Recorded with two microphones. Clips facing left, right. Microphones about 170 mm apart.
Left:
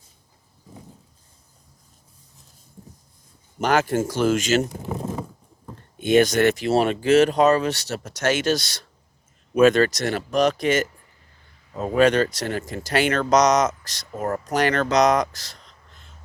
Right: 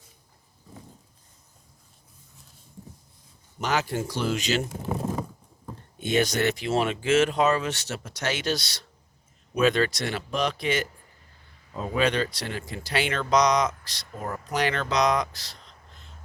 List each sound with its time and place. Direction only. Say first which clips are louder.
3.6 s speech: left 7 dB; 50° left (ahead or behind)
6.1 s speech: left 7 dB; 50° left (ahead or behind)
11.9 s speech: left 7 dB; 45° left (ahead or behind)